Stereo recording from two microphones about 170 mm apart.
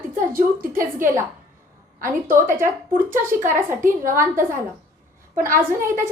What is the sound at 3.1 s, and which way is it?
A woman's voice, 50° right (ahead or behind).